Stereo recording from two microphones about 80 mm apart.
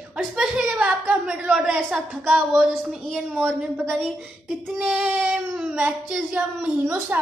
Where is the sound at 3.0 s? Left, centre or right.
Centre.